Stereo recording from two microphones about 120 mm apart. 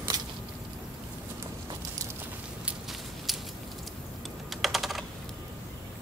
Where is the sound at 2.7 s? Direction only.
Centre (ahead or behind).